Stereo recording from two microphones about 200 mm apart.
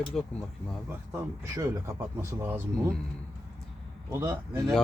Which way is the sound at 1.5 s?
15° right (ahead or behind).